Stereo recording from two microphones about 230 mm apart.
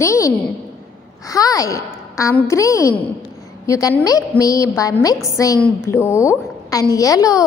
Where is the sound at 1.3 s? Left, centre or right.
Centre.